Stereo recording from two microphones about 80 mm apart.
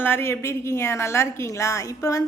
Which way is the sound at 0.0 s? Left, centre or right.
Left.